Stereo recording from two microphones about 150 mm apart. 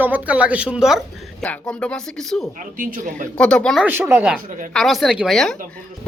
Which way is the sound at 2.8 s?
65° right (ahead or behind).